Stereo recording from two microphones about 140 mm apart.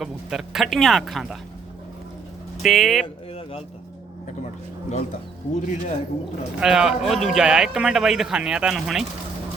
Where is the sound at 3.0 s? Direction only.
45° left (ahead or behind).